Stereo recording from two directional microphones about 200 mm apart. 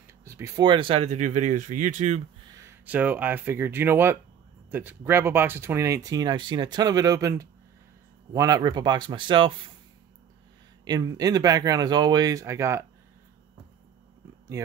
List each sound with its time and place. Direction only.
0.2 s speech: 15° right (ahead or behind); by 2.2 s 35° right (ahead or behind)
2.5 s speech: 10° right (ahead or behind)
10.9 s speech: 20° right (ahead or behind)